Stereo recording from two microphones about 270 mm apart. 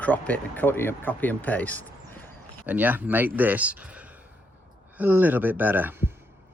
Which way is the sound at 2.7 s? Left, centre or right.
Centre.